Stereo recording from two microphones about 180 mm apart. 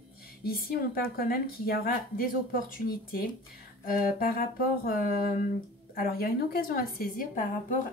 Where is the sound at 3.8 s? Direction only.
50° left (ahead or behind).